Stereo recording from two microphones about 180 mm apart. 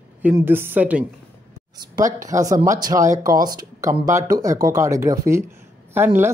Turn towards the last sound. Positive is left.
turn(degrees=-10)  # may be behind; listen again after turning